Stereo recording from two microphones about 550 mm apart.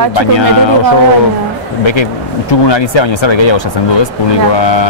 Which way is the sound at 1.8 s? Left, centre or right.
Left.